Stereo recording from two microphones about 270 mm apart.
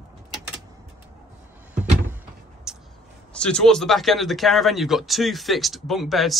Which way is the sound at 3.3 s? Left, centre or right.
Centre.